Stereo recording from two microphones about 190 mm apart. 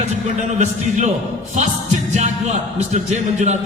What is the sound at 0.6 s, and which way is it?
Speech, 40° right (ahead or behind).